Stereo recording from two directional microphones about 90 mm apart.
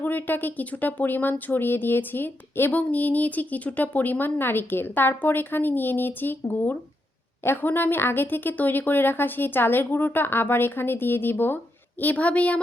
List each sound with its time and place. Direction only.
0.0 s speech: 20° left (ahead or behind)